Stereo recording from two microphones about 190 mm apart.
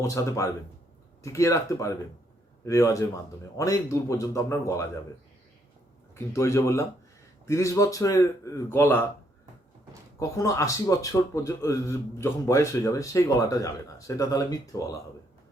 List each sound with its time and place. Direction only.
0.0 s a man's voice: 15° left (ahead or behind)
6.1 s a man's voice: 15° left (ahead or behind)
10.2 s a man's voice: 15° left (ahead or behind)